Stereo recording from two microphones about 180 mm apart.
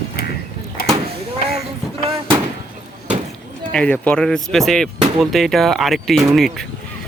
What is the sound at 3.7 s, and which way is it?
Speech, 5° left (ahead or behind).